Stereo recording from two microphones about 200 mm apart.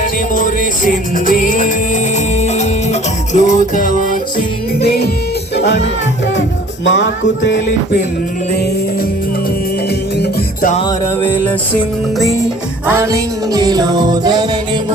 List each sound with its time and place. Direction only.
0.0 s music: 40° left (ahead or behind); by 5.8 s 60° left (ahead or behind)
6.8 s music: 65° left (ahead or behind)
10.2 s music: 45° left (ahead or behind)
10.8 s music: 20° left (ahead or behind)
12.9 s music: 15° right (ahead or behind)